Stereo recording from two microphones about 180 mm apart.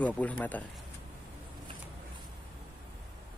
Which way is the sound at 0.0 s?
10° left (ahead or behind).